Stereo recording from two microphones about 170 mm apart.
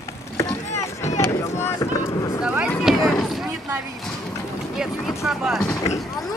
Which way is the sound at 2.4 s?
5° right (ahead or behind).